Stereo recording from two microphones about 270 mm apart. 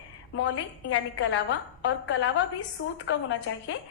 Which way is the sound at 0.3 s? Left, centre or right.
Left.